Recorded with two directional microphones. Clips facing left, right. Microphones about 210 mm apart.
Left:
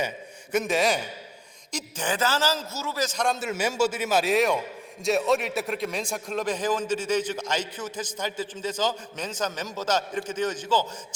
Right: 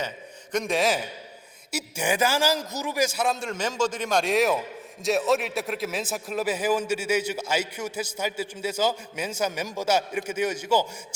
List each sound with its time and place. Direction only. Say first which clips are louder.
0.5 s a man's voice: even; centre (ahead or behind)